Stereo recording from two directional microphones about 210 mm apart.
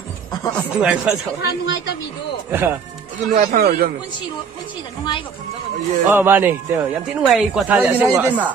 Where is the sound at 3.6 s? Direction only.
45° right (ahead or behind).